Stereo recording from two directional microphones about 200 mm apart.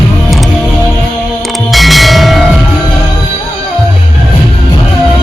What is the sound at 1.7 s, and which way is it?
Bell, centre (ahead or behind).